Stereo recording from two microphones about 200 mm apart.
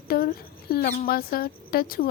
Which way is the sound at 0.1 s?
45° left (ahead or behind).